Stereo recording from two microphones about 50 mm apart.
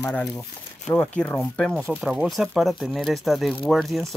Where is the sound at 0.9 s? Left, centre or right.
Left.